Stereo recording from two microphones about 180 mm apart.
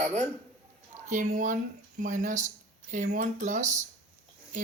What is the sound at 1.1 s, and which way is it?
Speech, 45° right (ahead or behind).